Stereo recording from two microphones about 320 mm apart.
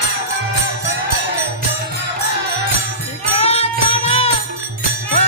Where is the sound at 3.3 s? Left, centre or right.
Centre.